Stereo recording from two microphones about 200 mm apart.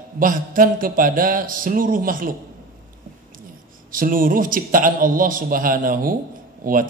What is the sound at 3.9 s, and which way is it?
A man's voice, 45° right (ahead or behind).